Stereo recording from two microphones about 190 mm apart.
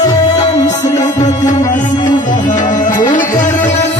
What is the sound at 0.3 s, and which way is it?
Music, 20° left (ahead or behind).